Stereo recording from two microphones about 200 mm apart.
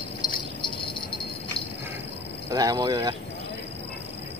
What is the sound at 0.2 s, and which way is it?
Jingle bell, 20° left (ahead or behind).